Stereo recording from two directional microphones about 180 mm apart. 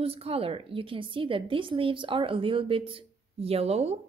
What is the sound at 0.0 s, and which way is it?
A woman's voice, 35° right (ahead or behind).